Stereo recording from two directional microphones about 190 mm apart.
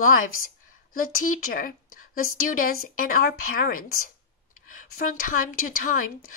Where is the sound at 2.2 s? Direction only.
90° left.